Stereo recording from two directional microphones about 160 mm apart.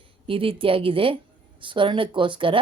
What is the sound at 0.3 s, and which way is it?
Speech, 35° right (ahead or behind).